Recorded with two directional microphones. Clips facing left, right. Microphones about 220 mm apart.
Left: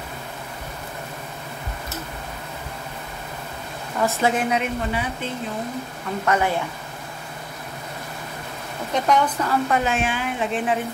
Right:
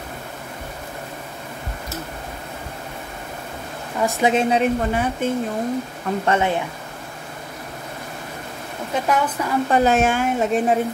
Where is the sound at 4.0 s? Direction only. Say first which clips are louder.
Right 3 dB; 15° right (ahead or behind).